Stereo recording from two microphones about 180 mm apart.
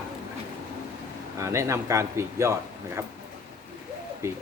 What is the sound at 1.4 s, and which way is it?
Speech, 15° right (ahead or behind).